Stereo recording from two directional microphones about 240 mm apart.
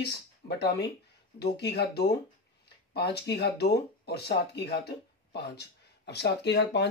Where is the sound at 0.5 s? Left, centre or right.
Left.